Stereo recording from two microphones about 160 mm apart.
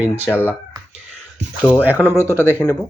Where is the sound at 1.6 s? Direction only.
10° right (ahead or behind).